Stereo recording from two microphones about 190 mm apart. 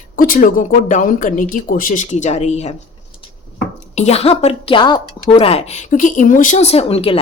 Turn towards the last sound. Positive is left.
turn(degrees=30)  # may be behind; listen again after turning